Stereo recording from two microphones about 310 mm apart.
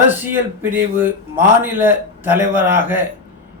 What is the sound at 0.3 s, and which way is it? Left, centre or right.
A man's voice, centre.